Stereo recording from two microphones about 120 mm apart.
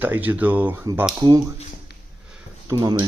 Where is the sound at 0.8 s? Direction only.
20° right (ahead or behind).